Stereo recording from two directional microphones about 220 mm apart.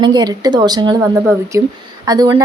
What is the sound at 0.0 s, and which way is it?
Speech, 20° right (ahead or behind).